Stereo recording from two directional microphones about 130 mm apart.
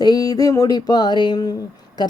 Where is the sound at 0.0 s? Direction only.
30° left (ahead or behind).